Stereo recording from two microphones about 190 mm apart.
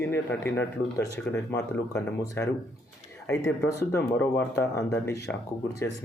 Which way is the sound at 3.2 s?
15° left (ahead or behind).